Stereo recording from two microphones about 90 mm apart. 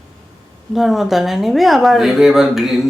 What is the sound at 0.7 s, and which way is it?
A man's voice, centre (ahead or behind).